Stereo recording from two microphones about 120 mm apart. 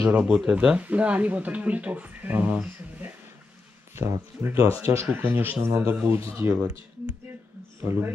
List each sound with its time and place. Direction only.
0.1 s speech: 10° right (ahead or behind)
7.8 s speech: 20° right (ahead or behind)